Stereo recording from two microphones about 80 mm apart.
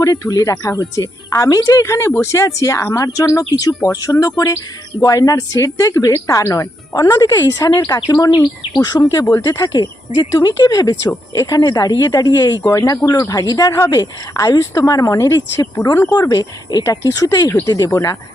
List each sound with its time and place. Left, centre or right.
0.0 s speech: left
8.4 s bird vocalization: left
9.2 s speech: left
17.9 s speech: left